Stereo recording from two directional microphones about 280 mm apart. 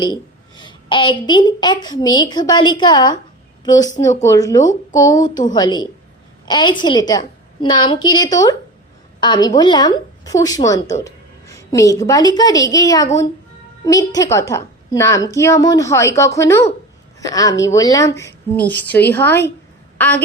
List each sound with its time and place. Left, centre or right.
0.0 s a woman's voice: centre